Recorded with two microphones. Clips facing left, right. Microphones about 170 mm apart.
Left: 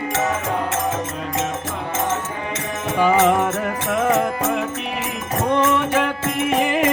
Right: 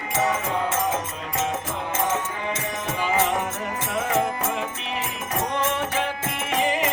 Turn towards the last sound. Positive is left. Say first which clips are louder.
# left 5 dB
turn(degrees=60)  # may be behind; listen again after turning